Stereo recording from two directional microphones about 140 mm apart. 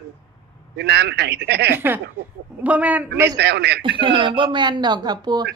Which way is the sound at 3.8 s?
35° right (ahead or behind).